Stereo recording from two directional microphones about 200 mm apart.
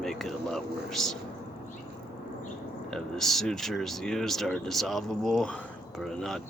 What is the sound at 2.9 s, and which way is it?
Speech, centre (ahead or behind).